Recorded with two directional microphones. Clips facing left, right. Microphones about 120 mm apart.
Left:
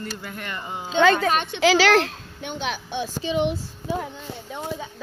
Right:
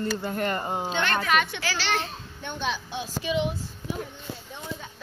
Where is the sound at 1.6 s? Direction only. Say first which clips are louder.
Left 11 dB; 90° left; by 2.8 s 70° left (ahead or behind).